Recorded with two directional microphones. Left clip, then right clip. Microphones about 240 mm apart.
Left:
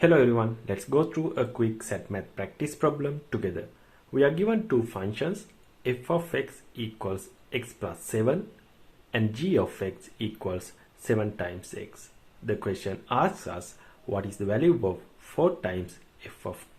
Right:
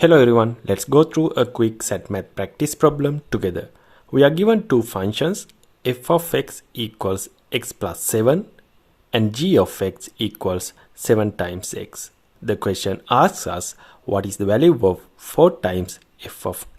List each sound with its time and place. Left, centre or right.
0.0 s speech: right